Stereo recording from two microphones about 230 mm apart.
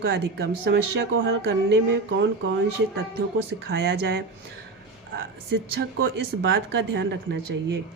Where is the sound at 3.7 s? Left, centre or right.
Right.